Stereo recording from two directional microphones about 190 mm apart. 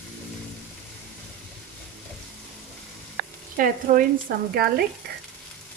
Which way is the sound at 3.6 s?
50° right (ahead or behind).